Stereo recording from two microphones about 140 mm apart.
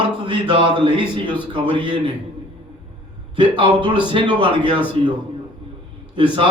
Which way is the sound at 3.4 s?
35° right (ahead or behind).